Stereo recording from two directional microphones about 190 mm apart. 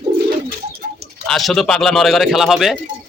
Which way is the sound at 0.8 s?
40° right (ahead or behind).